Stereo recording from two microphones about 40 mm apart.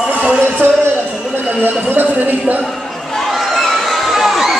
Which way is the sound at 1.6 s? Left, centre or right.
Right.